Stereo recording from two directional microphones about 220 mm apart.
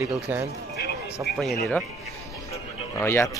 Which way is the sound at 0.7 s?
45° left (ahead or behind).